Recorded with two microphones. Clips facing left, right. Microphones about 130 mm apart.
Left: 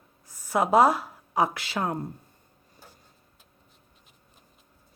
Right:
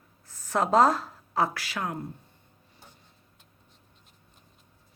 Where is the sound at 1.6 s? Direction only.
30° left (ahead or behind).